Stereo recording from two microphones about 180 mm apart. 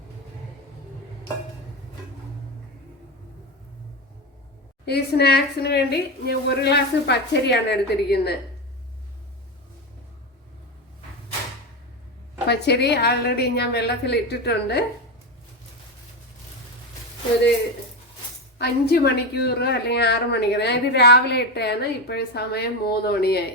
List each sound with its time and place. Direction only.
4.9 s a woman's voice: 65° left (ahead or behind)
12.5 s a woman's voice: 65° left (ahead or behind)
18.6 s a woman's voice: 65° left (ahead or behind)